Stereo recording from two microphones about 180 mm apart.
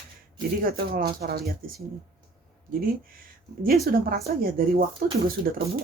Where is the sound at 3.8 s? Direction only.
55° right (ahead or behind).